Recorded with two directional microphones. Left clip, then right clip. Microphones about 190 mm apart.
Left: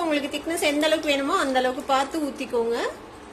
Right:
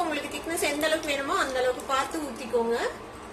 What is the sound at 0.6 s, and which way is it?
A woman's voice, 45° left (ahead or behind).